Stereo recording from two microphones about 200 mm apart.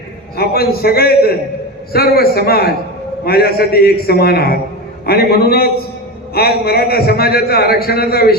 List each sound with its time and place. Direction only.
0.3 s a man's voice: 50° left (ahead or behind)